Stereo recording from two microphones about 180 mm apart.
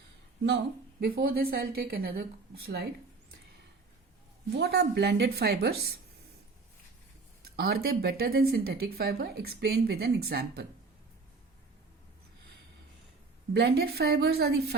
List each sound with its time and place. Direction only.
0.4 s speech: 65° right (ahead or behind)
4.5 s speech: 65° right (ahead or behind)
7.5 s speech: 60° right (ahead or behind)
13.5 s speech: 65° right (ahead or behind)